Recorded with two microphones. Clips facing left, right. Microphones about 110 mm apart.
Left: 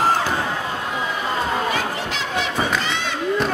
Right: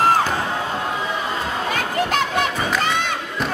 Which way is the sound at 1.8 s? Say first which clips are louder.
Right 4 dB; 50° right (ahead or behind).